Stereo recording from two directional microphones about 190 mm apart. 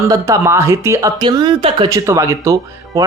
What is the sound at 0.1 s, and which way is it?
A woman's voice, 15° right (ahead or behind).